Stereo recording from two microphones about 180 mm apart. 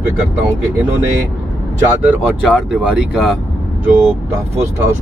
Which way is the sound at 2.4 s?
5° right (ahead or behind).